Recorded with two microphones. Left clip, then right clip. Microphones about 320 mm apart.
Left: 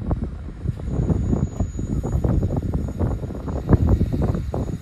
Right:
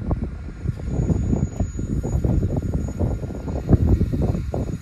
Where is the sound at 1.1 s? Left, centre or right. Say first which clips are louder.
Left 1 dB; centre.